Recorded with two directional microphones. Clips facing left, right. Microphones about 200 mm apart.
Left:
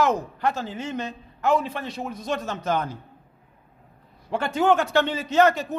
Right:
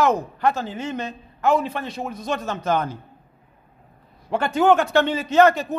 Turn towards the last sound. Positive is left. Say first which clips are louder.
# right 3 dB
turn(degrees=-55)  # may be behind; listen again after turning